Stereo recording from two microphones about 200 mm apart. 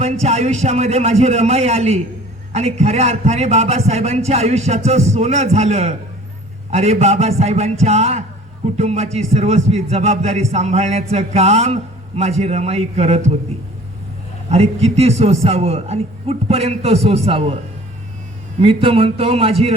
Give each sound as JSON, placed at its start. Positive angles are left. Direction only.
{"t": 0.0, "sound": "a man's voice", "side_deg": -35}
{"t": 14.5, "sound": "a man's voice", "side_deg": -30}
{"t": 18.6, "sound": "speech", "side_deg": -25}